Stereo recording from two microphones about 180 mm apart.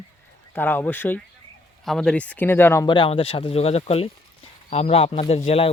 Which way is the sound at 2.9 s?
30° left (ahead or behind).